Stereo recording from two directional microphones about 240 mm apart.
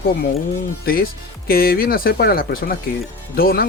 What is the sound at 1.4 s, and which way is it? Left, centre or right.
Speech, left.